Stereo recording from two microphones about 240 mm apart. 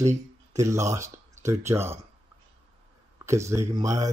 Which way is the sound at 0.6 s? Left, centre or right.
Centre.